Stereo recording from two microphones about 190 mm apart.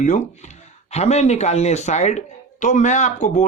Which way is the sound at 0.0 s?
40° left (ahead or behind).